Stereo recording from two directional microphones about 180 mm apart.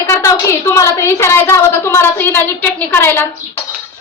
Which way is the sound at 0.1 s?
15° left (ahead or behind).